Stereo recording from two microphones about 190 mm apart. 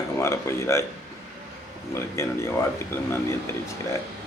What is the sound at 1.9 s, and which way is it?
Speech, 15° left (ahead or behind).